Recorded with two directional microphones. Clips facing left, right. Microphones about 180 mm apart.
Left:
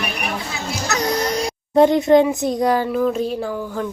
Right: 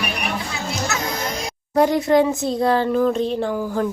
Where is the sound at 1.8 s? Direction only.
20° left (ahead or behind).